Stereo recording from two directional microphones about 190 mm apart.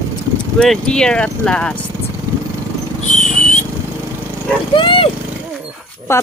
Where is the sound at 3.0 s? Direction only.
40° left (ahead or behind).